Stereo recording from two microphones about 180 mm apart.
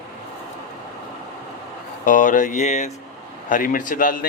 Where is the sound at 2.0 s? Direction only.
45° left (ahead or behind).